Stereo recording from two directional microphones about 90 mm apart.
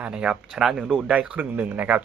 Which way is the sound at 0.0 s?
10° right (ahead or behind).